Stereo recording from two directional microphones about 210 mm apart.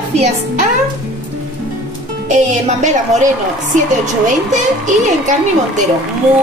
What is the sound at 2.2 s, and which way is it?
A woman's voice, 35° right (ahead or behind).